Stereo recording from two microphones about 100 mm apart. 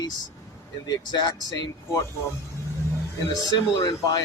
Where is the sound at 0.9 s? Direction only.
40° left (ahead or behind).